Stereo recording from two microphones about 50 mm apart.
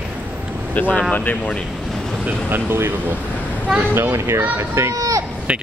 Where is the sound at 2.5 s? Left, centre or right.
Right.